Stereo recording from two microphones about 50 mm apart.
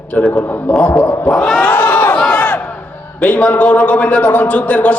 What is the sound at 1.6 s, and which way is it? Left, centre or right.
Chatter, left.